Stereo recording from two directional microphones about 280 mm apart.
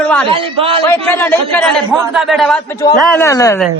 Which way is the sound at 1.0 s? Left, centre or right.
Centre.